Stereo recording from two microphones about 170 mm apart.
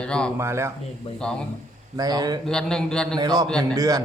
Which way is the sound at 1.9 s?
25° right (ahead or behind).